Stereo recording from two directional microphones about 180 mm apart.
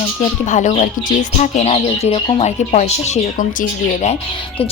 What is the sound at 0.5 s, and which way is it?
Speech, 40° left (ahead or behind).